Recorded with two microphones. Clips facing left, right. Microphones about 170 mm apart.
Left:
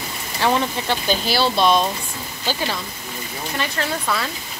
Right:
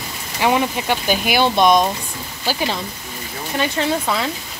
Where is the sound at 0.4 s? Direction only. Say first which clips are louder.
Right 2 dB; 15° right (ahead or behind).